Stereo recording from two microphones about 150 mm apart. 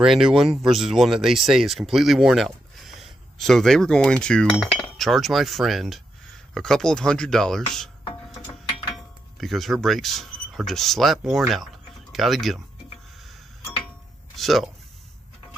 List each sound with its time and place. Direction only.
0.0 s speech: 5° right (ahead or behind)
4.7 s cutlery: 5° left (ahead or behind)
6.5 s speech: 5° left (ahead or behind)
8.9 s speech: centre (ahead or behind)
14.3 s speech: centre (ahead or behind)